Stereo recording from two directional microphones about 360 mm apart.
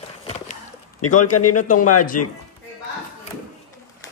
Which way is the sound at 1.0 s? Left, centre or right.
Left.